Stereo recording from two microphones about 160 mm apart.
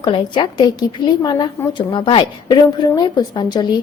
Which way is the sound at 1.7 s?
30° left (ahead or behind).